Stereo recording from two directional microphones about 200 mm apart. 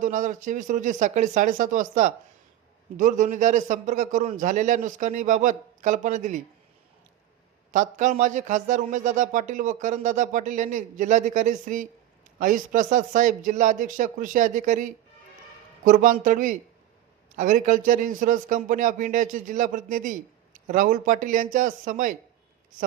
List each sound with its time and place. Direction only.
0.0 s a man's voice: 40° right (ahead or behind)
7.7 s a man's voice: 40° right (ahead or behind)